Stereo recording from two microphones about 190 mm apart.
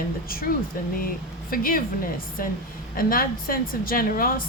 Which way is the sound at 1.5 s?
50° left (ahead or behind).